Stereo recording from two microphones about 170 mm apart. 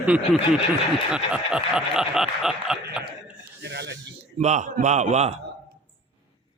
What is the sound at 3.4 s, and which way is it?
Snake, 80° right.